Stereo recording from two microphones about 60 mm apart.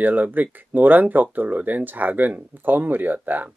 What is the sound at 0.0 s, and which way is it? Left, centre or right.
Speech, right.